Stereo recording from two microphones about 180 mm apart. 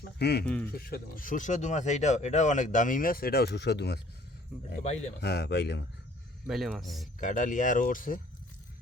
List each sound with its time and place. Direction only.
0.2 s speech: 65° left (ahead or behind)
0.4 s speech: 10° left (ahead or behind)
0.7 s speech: 55° left (ahead or behind)
4.8 s speech: 40° left (ahead or behind)
5.2 s speech: 65° left (ahead or behind)
6.5 s speech: centre (ahead or behind)
7.2 s speech: 45° left (ahead or behind)